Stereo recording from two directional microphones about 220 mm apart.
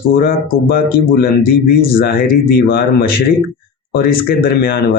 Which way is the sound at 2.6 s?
40° left (ahead or behind).